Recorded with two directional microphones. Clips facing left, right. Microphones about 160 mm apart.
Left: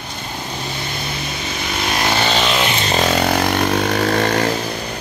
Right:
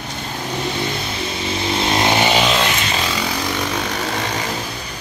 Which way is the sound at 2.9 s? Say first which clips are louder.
Left 6 dB; 50° left (ahead or behind).